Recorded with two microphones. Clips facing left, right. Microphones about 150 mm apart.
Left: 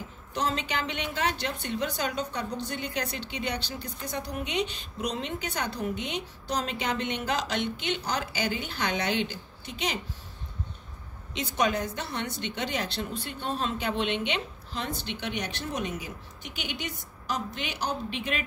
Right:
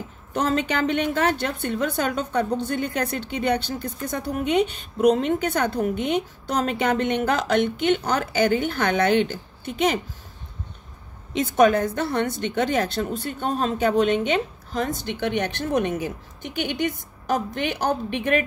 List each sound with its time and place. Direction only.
0.3 s a woman's voice: 55° right (ahead or behind)
11.3 s a woman's voice: 50° right (ahead or behind)